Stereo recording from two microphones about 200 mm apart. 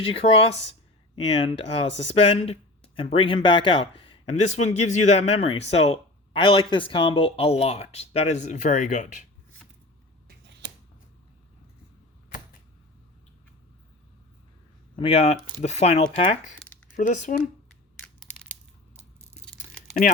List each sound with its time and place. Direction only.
0.0 s speech: 30° left (ahead or behind)
0.7 s a sound: 25° left (ahead or behind)
2.1 s speech: 30° left (ahead or behind)
10.2 s a sound: 55° right (ahead or behind)
14.9 s speech: 30° left (ahead or behind)
17.7 s crushing: 5° left (ahead or behind)